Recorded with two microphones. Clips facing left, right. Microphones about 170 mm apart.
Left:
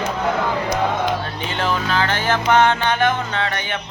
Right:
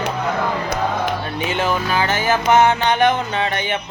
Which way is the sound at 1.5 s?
15° right (ahead or behind).